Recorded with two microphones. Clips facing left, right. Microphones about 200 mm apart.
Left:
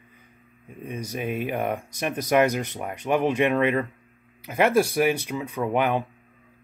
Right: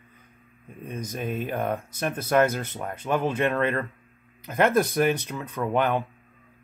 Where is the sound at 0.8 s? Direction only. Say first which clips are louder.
Left 1 dB; 10° left (ahead or behind).